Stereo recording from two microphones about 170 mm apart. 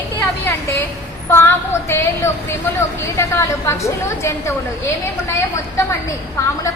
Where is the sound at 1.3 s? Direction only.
15° left (ahead or behind).